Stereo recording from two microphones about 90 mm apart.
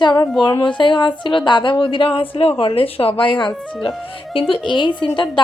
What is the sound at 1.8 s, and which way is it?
Speech, 75° left (ahead or behind).